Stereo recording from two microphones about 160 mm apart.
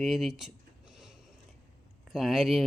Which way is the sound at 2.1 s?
Centre (ahead or behind).